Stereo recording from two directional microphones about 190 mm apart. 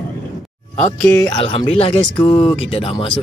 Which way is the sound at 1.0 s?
20° left (ahead or behind).